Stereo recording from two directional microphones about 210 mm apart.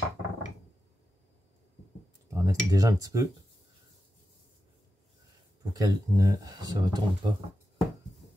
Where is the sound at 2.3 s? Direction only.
15° right (ahead or behind).